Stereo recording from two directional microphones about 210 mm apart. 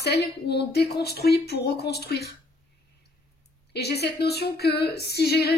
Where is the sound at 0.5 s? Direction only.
50° left (ahead or behind).